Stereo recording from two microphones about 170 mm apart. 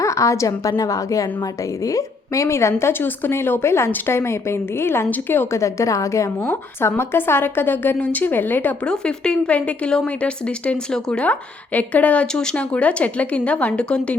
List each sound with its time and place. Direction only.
0.0 s a woman's voice: 20° left (ahead or behind)